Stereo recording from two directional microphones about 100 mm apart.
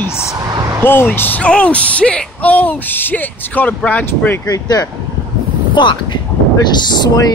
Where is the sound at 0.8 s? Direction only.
20° left (ahead or behind).